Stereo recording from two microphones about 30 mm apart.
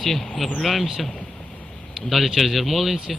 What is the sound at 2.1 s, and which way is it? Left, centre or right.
Speech, centre.